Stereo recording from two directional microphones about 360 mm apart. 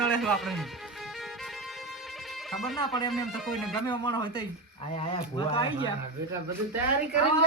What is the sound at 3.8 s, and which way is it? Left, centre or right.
Speech, centre.